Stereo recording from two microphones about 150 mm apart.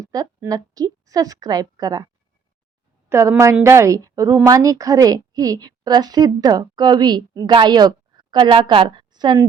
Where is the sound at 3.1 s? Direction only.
20° right (ahead or behind).